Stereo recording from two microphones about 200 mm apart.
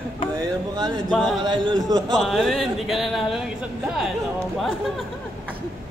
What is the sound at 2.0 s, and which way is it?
Speech, centre (ahead or behind).